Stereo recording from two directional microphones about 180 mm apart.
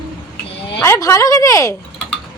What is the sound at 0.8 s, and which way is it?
Speech, 20° left (ahead or behind).